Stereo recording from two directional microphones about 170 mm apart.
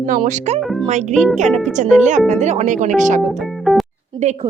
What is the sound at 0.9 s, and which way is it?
Speech, 45° right (ahead or behind).